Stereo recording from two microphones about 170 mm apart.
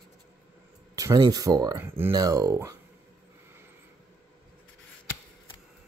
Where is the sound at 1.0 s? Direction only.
20° right (ahead or behind).